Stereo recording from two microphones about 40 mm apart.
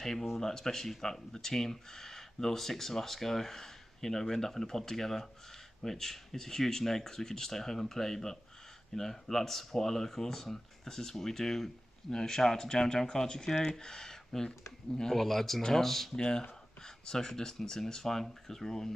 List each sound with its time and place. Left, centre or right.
0.0 s speech: centre
16.2 s speech: centre